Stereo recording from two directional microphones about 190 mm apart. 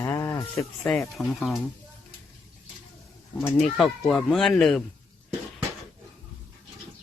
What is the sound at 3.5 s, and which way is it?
Speech, centre (ahead or behind).